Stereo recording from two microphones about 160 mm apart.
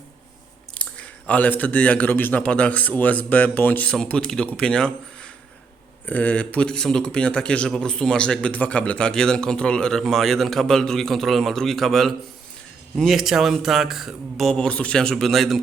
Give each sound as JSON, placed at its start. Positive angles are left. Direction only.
{"t": 0.7, "sound": "a man's voice", "side_deg": 10}